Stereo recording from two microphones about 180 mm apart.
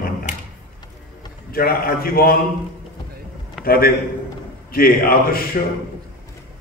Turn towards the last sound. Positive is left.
turn(degrees=55)  # may be behind; listen again after turning